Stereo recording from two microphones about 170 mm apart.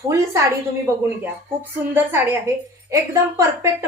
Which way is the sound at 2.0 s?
10° right (ahead or behind).